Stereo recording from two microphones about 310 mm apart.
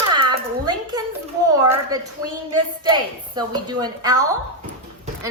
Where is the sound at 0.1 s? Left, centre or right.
Centre.